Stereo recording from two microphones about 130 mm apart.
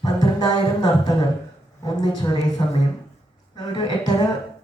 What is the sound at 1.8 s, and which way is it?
A woman's voice, 30° left (ahead or behind).